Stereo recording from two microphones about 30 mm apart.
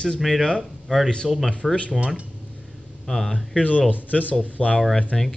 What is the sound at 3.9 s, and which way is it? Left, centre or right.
Speech, left.